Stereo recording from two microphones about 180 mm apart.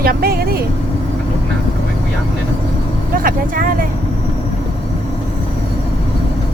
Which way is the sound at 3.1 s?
50° right (ahead or behind).